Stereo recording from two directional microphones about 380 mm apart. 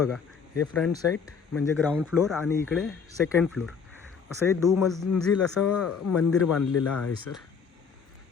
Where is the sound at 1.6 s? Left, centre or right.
Centre.